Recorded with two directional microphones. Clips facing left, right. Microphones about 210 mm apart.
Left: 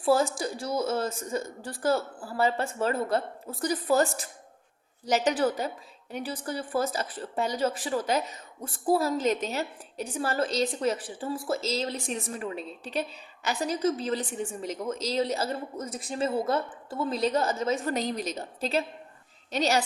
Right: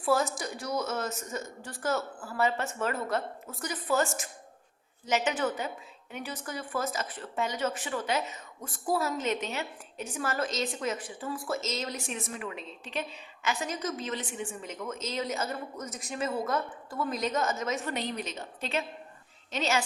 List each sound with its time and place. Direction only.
0.0 s a woman's voice: 30° left (ahead or behind)